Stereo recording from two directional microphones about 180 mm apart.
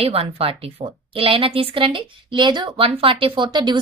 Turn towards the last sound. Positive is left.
turn(degrees=-25)  # may be behind; listen again after turning